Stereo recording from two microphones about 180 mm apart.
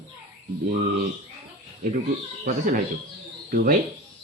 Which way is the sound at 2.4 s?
45° right (ahead or behind).